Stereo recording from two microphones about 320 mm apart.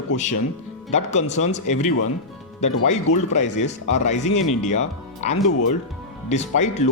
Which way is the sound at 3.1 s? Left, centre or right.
Left.